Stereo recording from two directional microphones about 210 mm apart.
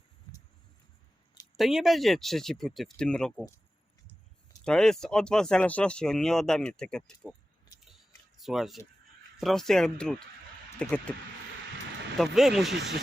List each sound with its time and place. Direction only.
1.5 s speech: centre (ahead or behind)
4.6 s speech: 5° left (ahead or behind)
7.9 s a sound: centre (ahead or behind)
9.4 s speech: centre (ahead or behind)
12.1 s speech: centre (ahead or behind)
12.7 s speech: 55° right (ahead or behind)